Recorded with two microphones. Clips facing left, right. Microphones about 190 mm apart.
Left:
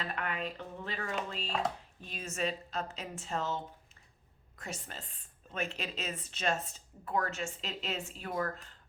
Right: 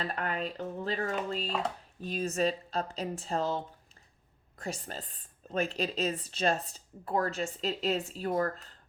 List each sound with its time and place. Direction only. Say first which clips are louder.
0.0 s speech: right 3 dB; 35° right (ahead or behind)